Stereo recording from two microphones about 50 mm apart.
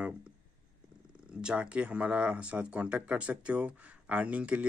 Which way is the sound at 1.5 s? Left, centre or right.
Right.